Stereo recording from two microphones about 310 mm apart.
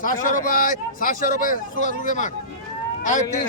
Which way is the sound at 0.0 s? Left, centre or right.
Left.